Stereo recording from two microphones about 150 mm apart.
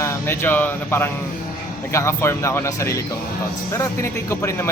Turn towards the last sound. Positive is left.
turn(degrees=20)  # may be behind; listen again after turning